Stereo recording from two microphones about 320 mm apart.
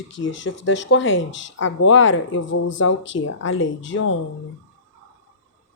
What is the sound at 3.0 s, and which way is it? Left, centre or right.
Speech, left.